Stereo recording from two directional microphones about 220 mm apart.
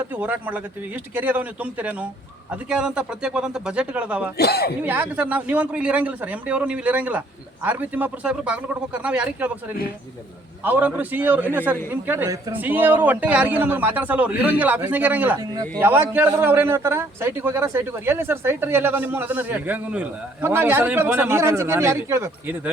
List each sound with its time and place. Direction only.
0.2 s a man's voice: 5° right (ahead or behind)
4.4 s speech: 50° left (ahead or behind)
4.8 s a man's voice: 5° right (ahead or behind)
10.6 s a man's voice: 10° right (ahead or behind)